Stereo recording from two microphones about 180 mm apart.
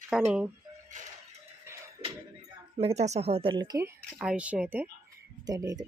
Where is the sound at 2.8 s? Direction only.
35° right (ahead or behind).